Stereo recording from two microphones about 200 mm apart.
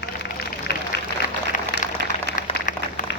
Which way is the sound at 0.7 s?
55° left (ahead or behind).